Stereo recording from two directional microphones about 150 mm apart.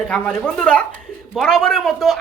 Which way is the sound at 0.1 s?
5° left (ahead or behind).